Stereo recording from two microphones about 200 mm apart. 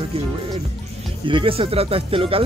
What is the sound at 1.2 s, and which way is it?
Speech, 25° right (ahead or behind).